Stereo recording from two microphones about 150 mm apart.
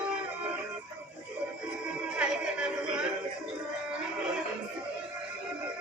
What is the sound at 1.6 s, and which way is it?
Music, 5° right (ahead or behind).